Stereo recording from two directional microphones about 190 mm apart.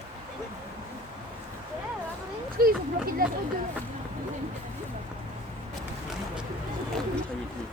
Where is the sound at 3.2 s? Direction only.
50° right (ahead or behind).